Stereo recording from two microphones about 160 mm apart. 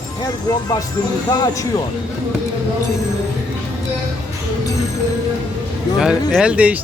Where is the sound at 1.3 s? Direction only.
25° left (ahead or behind).